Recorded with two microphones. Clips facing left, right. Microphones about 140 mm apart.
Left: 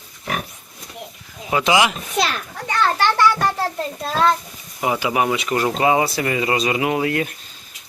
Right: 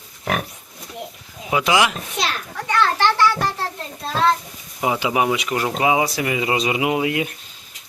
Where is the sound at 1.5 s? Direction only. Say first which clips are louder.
Left 1 dB; 5° right (ahead or behind).